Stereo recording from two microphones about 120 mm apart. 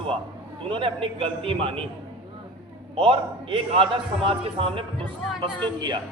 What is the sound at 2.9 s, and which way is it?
A man's voice, 50° right (ahead or behind).